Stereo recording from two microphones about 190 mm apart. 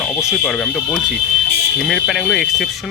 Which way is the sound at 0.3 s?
5° left (ahead or behind).